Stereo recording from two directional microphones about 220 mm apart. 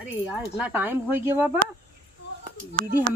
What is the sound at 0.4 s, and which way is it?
Speech, 5° right (ahead or behind).